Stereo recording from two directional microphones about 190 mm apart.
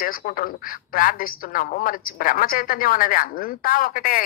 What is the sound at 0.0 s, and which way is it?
A woman's voice, 50° left (ahead or behind).